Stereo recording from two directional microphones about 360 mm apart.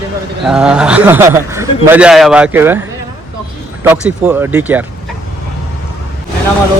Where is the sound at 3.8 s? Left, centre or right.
Centre.